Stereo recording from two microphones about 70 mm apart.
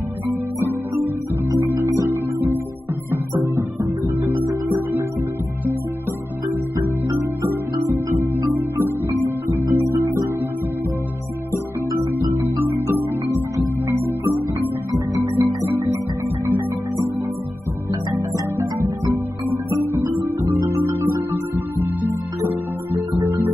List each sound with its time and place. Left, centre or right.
0.6 s music: right
8.1 s music: right
12.4 s music: right
15.3 s music: right
18.1 s music: right